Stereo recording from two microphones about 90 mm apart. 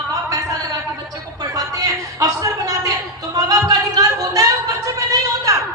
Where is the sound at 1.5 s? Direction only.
40° right (ahead or behind).